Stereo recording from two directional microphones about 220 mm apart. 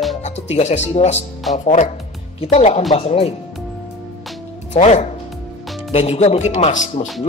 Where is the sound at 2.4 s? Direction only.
30° left (ahead or behind).